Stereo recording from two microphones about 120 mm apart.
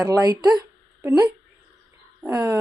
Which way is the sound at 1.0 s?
20° right (ahead or behind).